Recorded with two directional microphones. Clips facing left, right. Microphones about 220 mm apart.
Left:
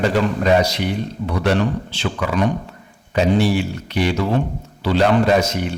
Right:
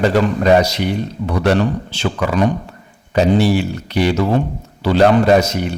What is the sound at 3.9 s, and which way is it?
A man's voice, 35° right (ahead or behind).